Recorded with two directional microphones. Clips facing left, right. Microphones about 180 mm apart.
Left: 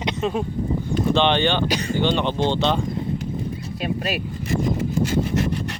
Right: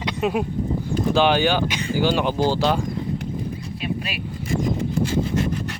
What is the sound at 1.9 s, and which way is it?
Speech, 5° right (ahead or behind).